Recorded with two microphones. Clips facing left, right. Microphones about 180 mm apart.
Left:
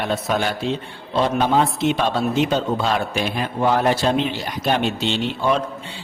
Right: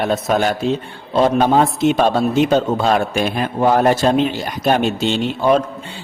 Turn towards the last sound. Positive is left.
turn(degrees=-45)  # may be behind; listen again after turning